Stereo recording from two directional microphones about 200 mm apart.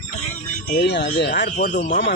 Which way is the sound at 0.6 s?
50° left (ahead or behind).